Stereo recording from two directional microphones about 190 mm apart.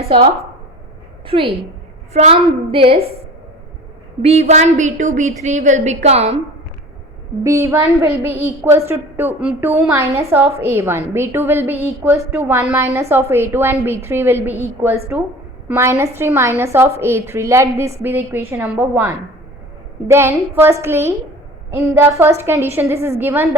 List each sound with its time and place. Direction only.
1.3 s a woman's voice: 30° right (ahead or behind)
4.2 s a woman's voice: 35° right (ahead or behind)
7.4 s a woman's voice: 15° right (ahead or behind)